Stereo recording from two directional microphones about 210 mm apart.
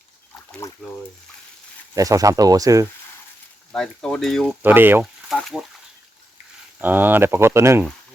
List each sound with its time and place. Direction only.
0.6 s speech: 15° left (ahead or behind)
2.0 s speech: 15° right (ahead or behind)
3.7 s speech: 5° left (ahead or behind)
4.6 s speech: 10° right (ahead or behind)
5.3 s speech: centre (ahead or behind)
6.7 s speech: 10° right (ahead or behind)